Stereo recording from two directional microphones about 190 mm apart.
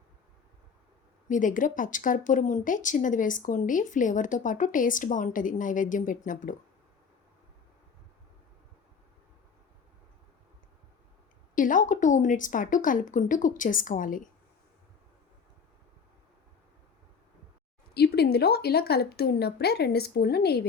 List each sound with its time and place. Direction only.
1.3 s speech: 45° left (ahead or behind)
11.5 s speech: 45° left (ahead or behind)
17.9 s a woman's voice: 60° left (ahead or behind)